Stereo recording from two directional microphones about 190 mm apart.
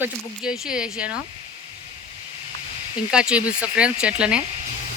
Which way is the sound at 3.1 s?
5° right (ahead or behind).